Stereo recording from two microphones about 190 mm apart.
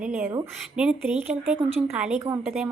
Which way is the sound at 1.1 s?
35° right (ahead or behind).